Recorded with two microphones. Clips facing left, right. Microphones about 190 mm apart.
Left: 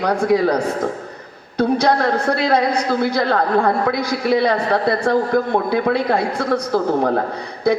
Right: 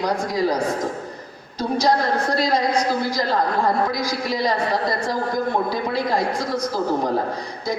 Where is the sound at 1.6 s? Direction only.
60° left (ahead or behind).